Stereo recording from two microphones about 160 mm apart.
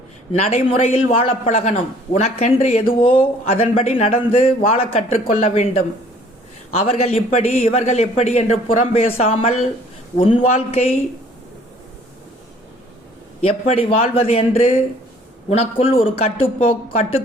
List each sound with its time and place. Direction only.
0.3 s a man's voice: 45° left (ahead or behind)
13.4 s speech: 40° left (ahead or behind)